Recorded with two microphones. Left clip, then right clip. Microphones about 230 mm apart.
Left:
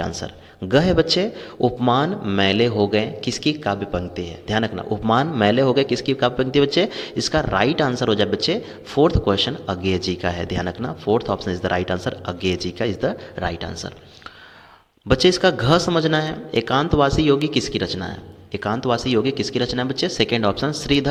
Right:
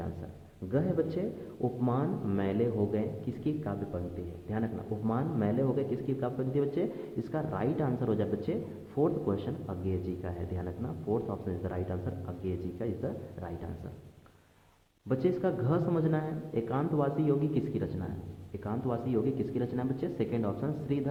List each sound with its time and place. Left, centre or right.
0.7 s a man's voice: left
15.0 s a man's voice: left